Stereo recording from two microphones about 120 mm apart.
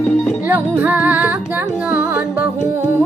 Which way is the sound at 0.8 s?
15° right (ahead or behind).